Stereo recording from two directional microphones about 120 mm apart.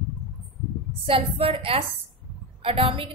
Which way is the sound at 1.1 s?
55° right (ahead or behind).